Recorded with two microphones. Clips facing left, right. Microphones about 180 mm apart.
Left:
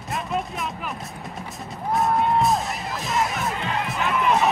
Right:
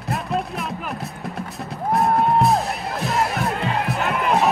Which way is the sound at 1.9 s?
60° right (ahead or behind).